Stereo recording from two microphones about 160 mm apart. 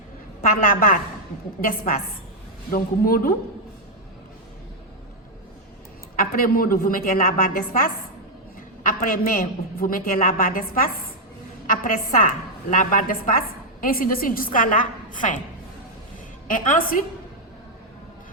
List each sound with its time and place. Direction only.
0.6 s a man's voice: 60° left (ahead or behind)
6.1 s a man's voice: 65° left (ahead or behind)
16.5 s a man's voice: 55° left (ahead or behind)